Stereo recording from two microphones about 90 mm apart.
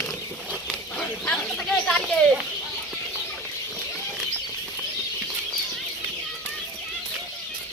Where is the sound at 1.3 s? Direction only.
10° left (ahead or behind).